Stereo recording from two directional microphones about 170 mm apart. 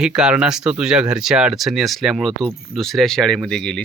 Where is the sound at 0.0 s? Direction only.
5° right (ahead or behind).